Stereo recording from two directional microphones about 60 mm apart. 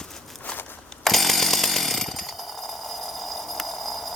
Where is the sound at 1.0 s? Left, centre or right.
Centre.